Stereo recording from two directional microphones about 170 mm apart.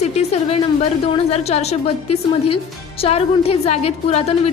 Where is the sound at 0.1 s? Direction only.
40° left (ahead or behind).